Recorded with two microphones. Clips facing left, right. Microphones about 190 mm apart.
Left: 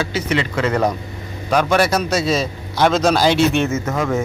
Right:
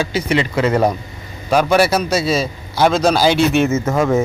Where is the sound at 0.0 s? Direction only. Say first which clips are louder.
Right 2 dB; 10° right (ahead or behind).